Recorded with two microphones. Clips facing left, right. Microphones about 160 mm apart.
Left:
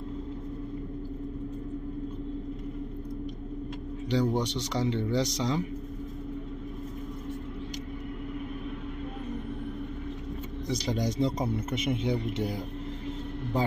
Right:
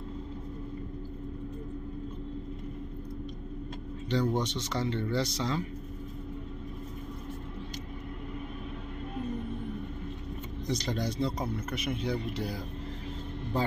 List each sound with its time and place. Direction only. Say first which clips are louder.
4.1 s a man's voice: left 2 dB; 10° left (ahead or behind)
10.7 s speech: left 2 dB; 15° left (ahead or behind)